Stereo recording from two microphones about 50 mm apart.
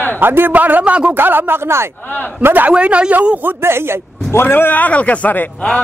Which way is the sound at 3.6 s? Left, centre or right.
Right.